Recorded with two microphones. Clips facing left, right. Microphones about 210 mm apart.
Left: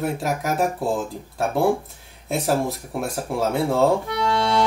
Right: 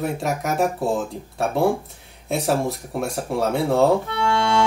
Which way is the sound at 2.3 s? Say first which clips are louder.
Even; centre (ahead or behind).